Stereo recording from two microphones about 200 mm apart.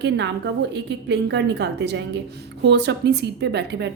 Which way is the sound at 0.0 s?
60° right (ahead or behind).